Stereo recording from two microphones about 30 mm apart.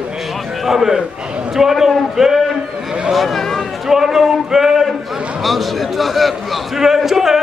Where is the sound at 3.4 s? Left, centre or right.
Centre.